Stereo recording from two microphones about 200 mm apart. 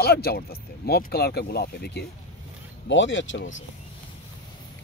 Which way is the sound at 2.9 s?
65° left (ahead or behind).